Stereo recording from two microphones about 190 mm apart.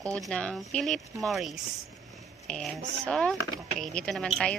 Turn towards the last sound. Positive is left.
turn(degrees=5)  # may be behind; listen again after turning